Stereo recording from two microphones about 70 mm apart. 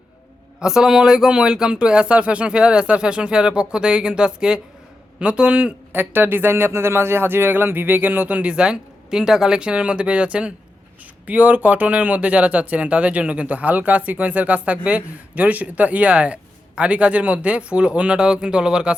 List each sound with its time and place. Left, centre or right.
0.6 s speech: centre
5.9 s speech: right; by 18.9 s centre